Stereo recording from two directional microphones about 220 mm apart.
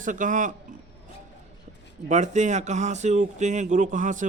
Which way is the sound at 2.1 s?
30° right (ahead or behind).